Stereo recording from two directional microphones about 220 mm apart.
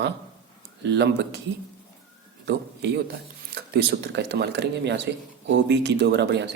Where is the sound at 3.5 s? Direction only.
45° right (ahead or behind).